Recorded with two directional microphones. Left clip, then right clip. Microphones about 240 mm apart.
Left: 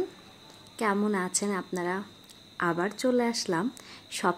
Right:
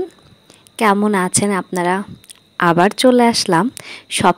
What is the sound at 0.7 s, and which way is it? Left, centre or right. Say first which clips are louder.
Speech: right 13 dB; right.